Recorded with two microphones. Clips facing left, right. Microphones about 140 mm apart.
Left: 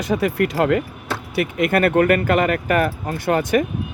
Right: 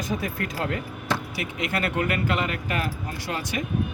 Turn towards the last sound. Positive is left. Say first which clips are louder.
# left 12 dB
turn(degrees=55)  # may be behind; listen again after turning